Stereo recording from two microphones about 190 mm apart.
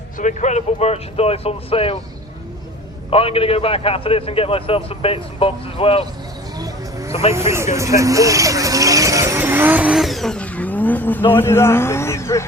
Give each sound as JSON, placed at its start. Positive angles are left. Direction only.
{"t": 0.2, "sound": "speech", "side_deg": 40}
{"t": 3.1, "sound": "a man's voice", "side_deg": 30}
{"t": 7.1, "sound": "speech", "side_deg": 30}
{"t": 7.3, "sound": "speech", "side_deg": -15}